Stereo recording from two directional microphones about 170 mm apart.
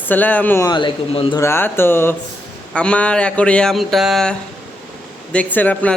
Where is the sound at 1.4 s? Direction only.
15° left (ahead or behind).